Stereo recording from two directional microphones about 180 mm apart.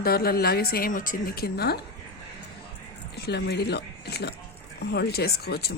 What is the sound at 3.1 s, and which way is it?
Speech, 65° left (ahead or behind).